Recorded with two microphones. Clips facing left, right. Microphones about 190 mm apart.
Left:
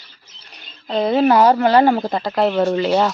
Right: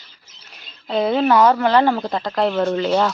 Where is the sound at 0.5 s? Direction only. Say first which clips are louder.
Even; 5° right (ahead or behind).